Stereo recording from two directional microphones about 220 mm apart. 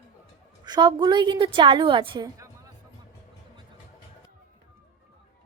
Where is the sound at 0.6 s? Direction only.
20° right (ahead or behind).